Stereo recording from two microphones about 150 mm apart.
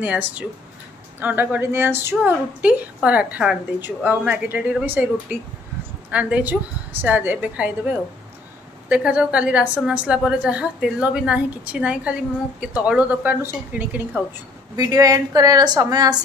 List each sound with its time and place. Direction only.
0.0 s a woman's voice: 10° right (ahead or behind)
8.8 s a woman's voice: 10° right (ahead or behind)
14.8 s a woman's voice: 25° right (ahead or behind)